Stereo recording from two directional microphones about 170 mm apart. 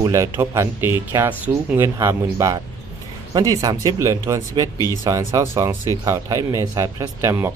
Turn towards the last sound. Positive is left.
turn(degrees=-15)  # may be behind; listen again after turning